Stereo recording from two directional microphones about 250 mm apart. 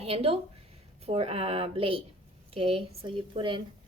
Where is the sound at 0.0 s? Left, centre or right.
Right.